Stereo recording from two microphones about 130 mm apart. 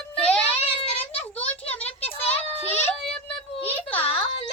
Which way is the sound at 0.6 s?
50° left (ahead or behind).